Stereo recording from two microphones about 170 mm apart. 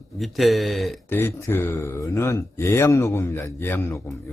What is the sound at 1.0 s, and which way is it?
A man's voice, 15° left (ahead or behind).